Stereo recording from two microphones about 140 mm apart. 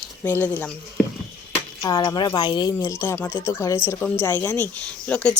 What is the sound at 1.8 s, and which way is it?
Speech, 25° left (ahead or behind).